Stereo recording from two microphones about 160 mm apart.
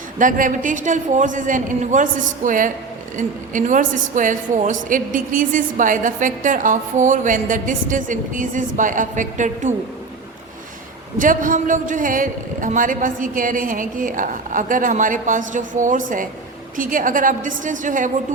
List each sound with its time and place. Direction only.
0.2 s a woman's voice: 55° right (ahead or behind)
11.2 s a woman's voice: 55° right (ahead or behind)